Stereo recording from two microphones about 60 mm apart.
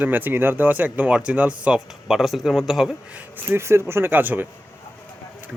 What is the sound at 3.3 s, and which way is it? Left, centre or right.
Speech, right.